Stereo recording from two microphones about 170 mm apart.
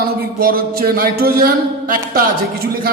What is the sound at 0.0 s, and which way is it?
A man's voice, 60° right (ahead or behind).